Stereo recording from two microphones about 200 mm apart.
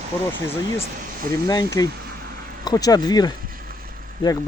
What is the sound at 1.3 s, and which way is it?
Speech, 20° left (ahead or behind).